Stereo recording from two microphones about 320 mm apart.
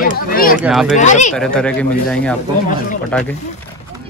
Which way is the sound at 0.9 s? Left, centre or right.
Left.